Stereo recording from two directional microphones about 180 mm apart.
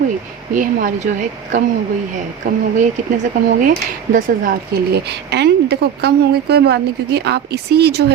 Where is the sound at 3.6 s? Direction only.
50° right (ahead or behind).